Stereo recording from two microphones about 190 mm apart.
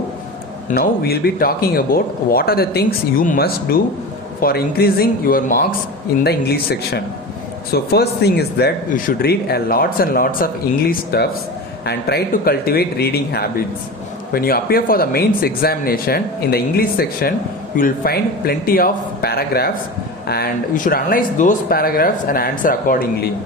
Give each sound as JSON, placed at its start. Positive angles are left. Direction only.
{"t": 0.7, "sound": "speech", "side_deg": 55}